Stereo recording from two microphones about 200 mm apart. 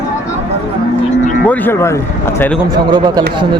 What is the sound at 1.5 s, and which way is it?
Speech, 10° left (ahead or behind).